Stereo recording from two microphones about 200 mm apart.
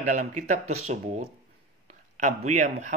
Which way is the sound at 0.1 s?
40° right (ahead or behind).